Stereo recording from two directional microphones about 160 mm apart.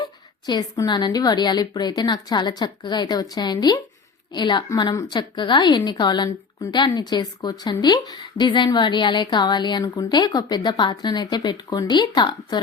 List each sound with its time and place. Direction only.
0.0 s a woman's voice: 25° left (ahead or behind)